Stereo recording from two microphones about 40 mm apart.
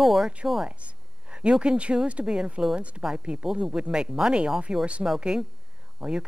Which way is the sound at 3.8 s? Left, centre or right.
Right.